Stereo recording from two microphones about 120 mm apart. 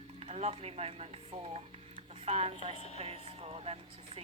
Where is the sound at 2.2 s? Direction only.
60° right (ahead or behind).